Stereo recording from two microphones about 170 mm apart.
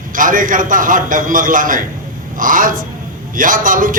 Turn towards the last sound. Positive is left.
turn(degrees=-50)  # may be behind; listen again after turning